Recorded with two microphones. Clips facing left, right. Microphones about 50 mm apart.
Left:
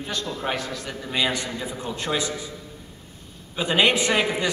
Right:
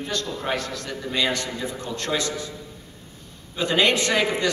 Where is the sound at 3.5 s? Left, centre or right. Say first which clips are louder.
Even; centre.